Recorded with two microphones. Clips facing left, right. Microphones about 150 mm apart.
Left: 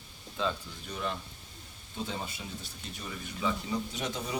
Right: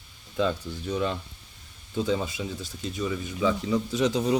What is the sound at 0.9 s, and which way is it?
Speech, 90° right.